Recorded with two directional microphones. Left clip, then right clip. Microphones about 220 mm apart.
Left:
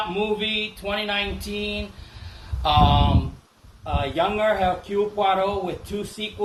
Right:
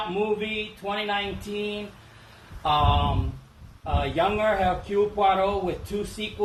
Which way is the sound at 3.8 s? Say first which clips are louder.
Left 1 dB; 15° left (ahead or behind).